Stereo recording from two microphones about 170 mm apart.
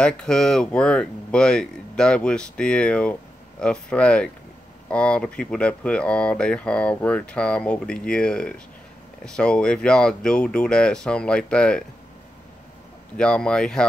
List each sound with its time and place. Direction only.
0.0 s speech: 5° left (ahead or behind)
13.2 s speech: 5° left (ahead or behind)